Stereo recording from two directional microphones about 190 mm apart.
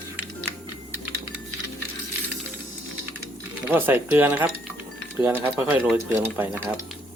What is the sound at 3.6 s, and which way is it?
Speech, 10° right (ahead or behind).